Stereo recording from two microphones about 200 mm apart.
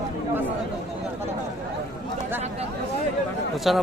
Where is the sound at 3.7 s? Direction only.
Centre (ahead or behind).